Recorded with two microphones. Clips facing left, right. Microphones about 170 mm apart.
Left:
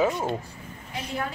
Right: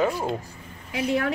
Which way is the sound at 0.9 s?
75° right (ahead or behind).